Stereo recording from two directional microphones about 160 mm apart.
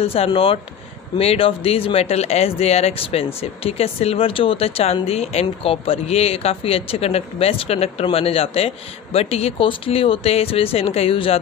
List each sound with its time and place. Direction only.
0.0 s speech: 35° left (ahead or behind)